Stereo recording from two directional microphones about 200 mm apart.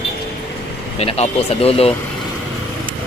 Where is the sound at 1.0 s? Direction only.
30° left (ahead or behind).